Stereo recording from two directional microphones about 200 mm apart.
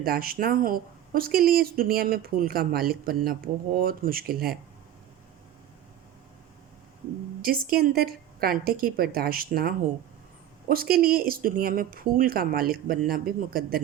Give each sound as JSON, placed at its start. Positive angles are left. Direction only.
{"t": 0.0, "sound": "speech", "side_deg": -50}
{"t": 7.4, "sound": "speech", "side_deg": -50}